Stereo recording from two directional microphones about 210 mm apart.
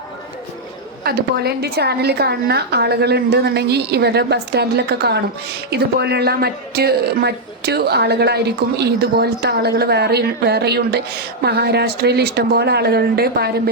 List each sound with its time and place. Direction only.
1.0 s a woman's voice: 50° right (ahead or behind)